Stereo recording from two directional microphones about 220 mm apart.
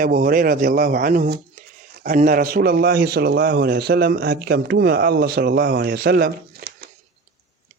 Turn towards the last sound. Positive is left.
turn(degrees=-45)  # may be behind; listen again after turning